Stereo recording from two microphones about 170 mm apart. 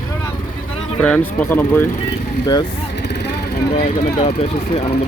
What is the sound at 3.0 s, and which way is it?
Vehicle, 75° left (ahead or behind).